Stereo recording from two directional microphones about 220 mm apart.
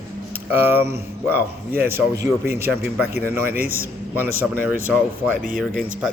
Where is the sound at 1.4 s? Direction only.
45° right (ahead or behind).